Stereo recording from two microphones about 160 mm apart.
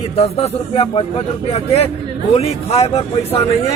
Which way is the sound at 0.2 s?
40° left (ahead or behind).